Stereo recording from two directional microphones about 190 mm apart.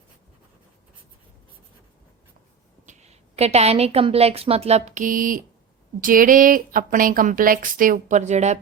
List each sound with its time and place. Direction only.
2.8 s a woman's voice: 40° right (ahead or behind)